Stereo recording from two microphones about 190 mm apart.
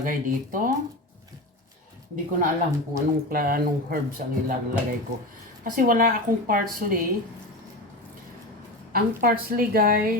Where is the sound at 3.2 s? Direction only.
50° right (ahead or behind).